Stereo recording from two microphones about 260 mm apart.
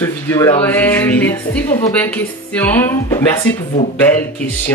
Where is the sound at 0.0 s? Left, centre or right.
Centre.